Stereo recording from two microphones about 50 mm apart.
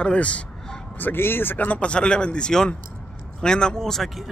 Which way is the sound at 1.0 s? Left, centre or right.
Left.